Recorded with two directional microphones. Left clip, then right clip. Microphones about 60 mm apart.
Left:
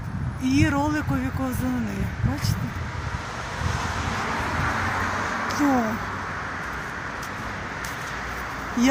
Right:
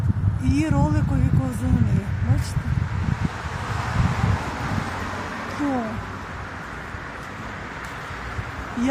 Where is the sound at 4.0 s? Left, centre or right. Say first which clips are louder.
Even; right.